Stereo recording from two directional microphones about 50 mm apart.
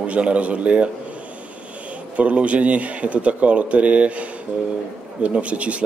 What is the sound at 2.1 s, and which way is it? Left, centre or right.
A man's voice, right.